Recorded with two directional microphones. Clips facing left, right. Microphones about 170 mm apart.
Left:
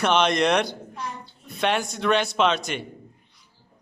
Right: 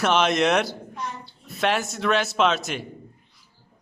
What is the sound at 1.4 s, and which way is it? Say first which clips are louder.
A man's voice: even; centre (ahead or behind).